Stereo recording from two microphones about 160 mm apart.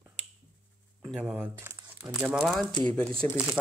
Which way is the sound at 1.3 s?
15° right (ahead or behind).